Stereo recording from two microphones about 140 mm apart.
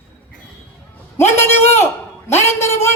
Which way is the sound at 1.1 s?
15° left (ahead or behind).